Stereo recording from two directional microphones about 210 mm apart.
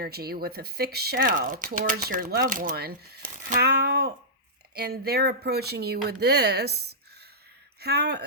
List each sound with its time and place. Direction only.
0.0 s speech: 45° right (ahead or behind)